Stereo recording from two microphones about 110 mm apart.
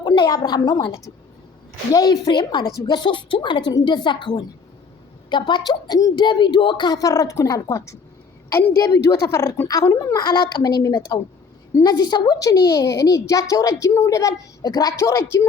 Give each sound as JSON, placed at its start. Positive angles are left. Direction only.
{"t": 0.0, "sound": "a woman's voice", "side_deg": 45}
{"t": 7.1, "sound": "a woman's voice", "side_deg": 30}